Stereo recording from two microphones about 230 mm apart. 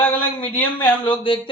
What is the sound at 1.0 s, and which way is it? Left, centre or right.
Speech, left.